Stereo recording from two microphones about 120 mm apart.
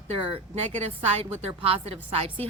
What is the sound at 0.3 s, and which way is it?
A woman's voice, 55° right (ahead or behind).